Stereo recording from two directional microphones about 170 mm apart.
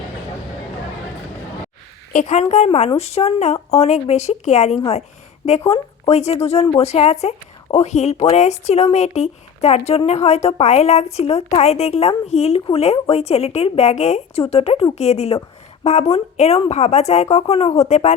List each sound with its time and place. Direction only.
2.1 s speech: 40° left (ahead or behind)